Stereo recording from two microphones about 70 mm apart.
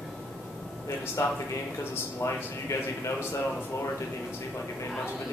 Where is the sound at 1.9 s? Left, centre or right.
Left.